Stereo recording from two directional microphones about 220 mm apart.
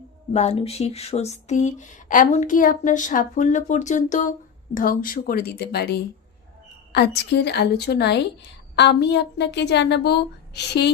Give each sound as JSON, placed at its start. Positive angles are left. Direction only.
{"t": 0.3, "sound": "a woman's voice", "side_deg": 30}